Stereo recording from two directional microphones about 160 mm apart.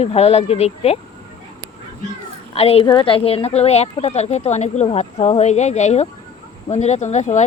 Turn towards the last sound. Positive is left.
turn(degrees=45)  # may be behind; listen again after turning